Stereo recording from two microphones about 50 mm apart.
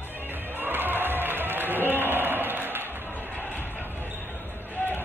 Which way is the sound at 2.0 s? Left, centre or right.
Right.